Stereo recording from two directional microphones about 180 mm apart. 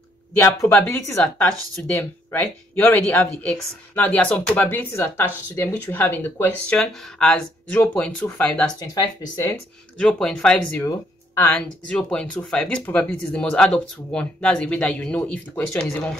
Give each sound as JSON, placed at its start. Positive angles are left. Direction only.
{"t": 0.4, "sound": "speech", "side_deg": 10}
{"t": 8.7, "sound": "speech", "side_deg": 20}
{"t": 9.5, "sound": "speech", "side_deg": 5}
{"t": 10.8, "sound": "speech", "side_deg": 15}